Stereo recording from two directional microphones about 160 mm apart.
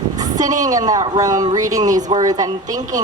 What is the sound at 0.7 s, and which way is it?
Speech, 25° right (ahead or behind).